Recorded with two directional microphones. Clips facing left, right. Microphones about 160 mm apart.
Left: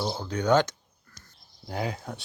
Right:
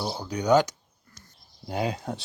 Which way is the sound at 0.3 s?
15° right (ahead or behind).